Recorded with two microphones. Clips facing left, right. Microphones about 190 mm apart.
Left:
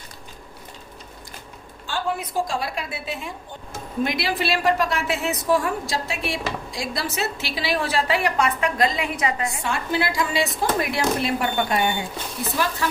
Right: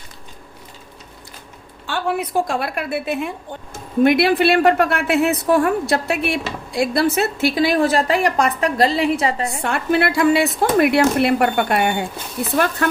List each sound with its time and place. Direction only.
1.9 s a woman's voice: 65° right (ahead or behind); by 9.0 s 35° right (ahead or behind)
9.6 s a woman's voice: 60° right (ahead or behind)